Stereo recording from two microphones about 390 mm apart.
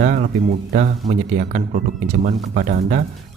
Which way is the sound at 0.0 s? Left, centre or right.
Right.